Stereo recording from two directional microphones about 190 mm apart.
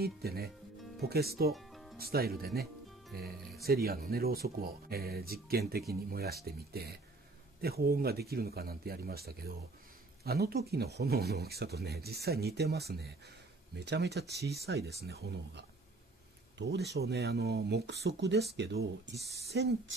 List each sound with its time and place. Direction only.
0.0 s speech: 55° right (ahead or behind)
1.5 s music: centre (ahead or behind)
2.0 s speech: 55° right (ahead or behind); by 19.7 s 70° right (ahead or behind)